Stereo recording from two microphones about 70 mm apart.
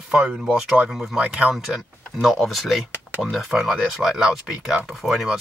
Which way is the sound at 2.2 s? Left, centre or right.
Centre.